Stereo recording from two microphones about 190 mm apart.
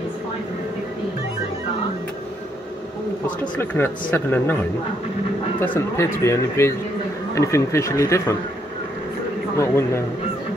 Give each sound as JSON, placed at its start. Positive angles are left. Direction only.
{"t": 3.7, "sound": "speech", "side_deg": 10}
{"t": 5.9, "sound": "speech", "side_deg": 15}
{"t": 9.6, "sound": "speech", "side_deg": 15}